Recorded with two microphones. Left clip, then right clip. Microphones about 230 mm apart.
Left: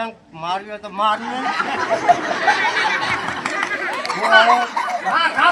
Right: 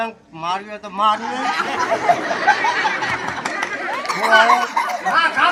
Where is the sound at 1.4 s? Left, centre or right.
Right.